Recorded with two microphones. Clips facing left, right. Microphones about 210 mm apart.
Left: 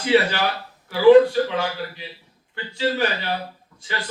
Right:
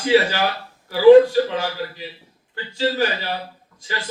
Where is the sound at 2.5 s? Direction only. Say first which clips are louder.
Right 1 dB; 40° right (ahead or behind).